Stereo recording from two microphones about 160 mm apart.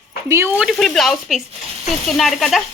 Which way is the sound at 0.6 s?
Centre (ahead or behind).